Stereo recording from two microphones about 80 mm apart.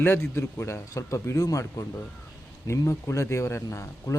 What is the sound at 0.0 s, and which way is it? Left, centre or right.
A man's voice, left.